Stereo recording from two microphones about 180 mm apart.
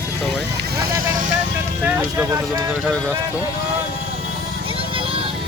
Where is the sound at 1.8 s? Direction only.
10° right (ahead or behind).